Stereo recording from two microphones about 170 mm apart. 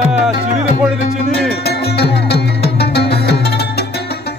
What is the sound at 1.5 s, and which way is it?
Music, 70° left (ahead or behind).